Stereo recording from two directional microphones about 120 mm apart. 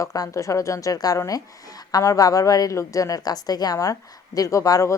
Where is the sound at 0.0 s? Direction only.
30° left (ahead or behind).